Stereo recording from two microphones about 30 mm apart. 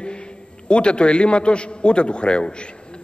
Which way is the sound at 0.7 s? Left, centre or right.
Left.